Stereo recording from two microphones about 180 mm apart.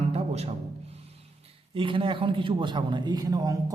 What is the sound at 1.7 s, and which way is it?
A man's voice, 30° right (ahead or behind).